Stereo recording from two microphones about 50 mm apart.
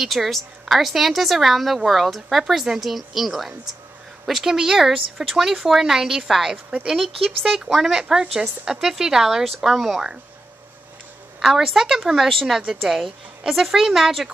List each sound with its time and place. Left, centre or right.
0.0 s a woman's voice: centre
6.5 s a woman's voice: right
6.9 s speech: centre
11.3 s a woman's voice: centre